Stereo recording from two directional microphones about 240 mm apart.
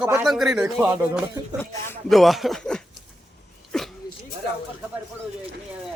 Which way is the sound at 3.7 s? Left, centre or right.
Centre.